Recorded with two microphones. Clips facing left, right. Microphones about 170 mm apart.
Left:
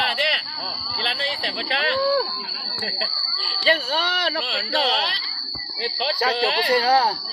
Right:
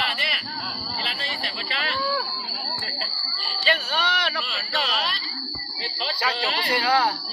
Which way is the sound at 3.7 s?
50° left (ahead or behind).